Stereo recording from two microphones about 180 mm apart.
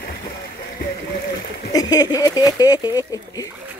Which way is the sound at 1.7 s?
20° left (ahead or behind).